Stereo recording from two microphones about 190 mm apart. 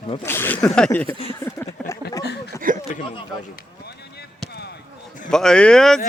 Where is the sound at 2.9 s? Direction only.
40° left (ahead or behind).